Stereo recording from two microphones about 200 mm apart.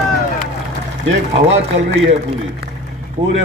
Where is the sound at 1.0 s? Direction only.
65° right (ahead or behind).